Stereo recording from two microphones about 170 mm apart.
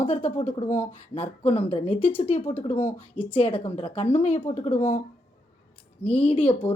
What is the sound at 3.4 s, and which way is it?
Speech, 30° left (ahead or behind).